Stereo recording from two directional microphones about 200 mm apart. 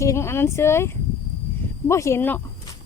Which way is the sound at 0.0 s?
15° left (ahead or behind).